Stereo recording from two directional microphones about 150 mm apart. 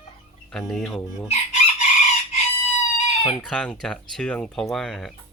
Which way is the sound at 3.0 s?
35° left (ahead or behind).